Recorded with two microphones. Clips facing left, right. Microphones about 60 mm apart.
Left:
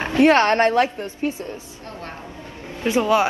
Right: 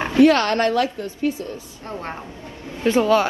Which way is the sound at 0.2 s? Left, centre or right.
Left.